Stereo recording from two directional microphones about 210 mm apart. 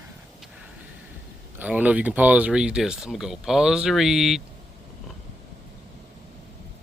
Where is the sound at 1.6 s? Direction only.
5° right (ahead or behind).